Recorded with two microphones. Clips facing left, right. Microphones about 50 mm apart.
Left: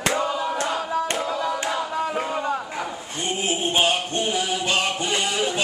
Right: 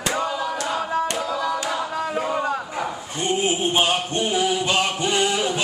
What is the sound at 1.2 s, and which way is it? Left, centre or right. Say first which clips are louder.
Hands: right 1 dB; centre.